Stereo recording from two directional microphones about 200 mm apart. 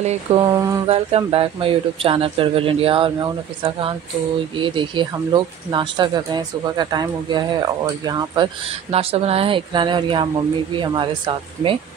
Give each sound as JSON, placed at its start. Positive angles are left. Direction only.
{"t": 0.0, "sound": "mantra", "side_deg": -35}
{"t": 0.4, "sound": "speech", "side_deg": -20}
{"t": 0.8, "sound": "speech", "side_deg": -30}
{"t": 8.9, "sound": "speech", "side_deg": -30}